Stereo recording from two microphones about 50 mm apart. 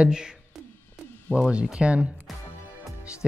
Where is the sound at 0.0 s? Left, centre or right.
Centre.